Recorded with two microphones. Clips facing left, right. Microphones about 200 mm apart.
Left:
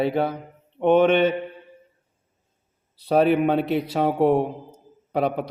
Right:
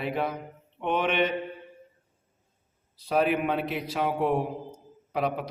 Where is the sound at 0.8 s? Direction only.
40° left (ahead or behind).